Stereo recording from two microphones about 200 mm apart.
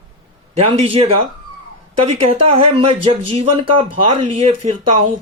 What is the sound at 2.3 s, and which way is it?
Speech, 30° right (ahead or behind).